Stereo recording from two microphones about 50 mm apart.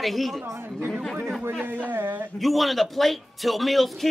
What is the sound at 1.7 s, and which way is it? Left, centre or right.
Speech, right.